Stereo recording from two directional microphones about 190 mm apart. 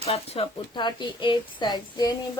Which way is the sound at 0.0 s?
30° left (ahead or behind).